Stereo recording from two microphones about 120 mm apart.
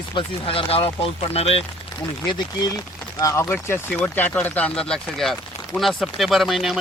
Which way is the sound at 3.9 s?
10° left (ahead or behind).